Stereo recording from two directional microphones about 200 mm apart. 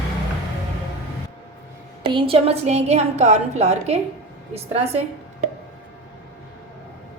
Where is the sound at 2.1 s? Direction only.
25° right (ahead or behind).